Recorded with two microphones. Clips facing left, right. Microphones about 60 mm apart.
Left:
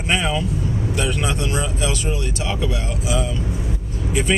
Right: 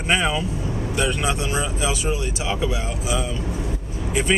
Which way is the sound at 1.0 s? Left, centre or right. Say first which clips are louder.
Right 1 dB; centre.